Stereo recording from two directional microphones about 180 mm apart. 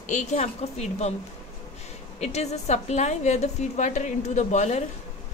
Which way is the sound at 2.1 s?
40° left (ahead or behind).